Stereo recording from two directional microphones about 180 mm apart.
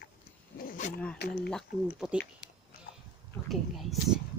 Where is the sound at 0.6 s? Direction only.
50° left (ahead or behind).